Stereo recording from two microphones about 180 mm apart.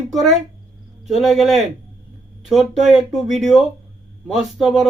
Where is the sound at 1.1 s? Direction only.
Centre (ahead or behind).